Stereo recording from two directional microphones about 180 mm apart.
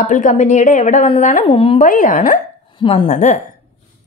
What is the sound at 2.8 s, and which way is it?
Speech, 25° left (ahead or behind).